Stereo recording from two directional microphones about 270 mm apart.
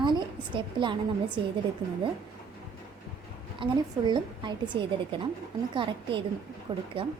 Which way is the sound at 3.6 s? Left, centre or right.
Centre.